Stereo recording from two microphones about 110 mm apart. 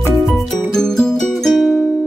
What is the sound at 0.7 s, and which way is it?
Music, 5° left (ahead or behind).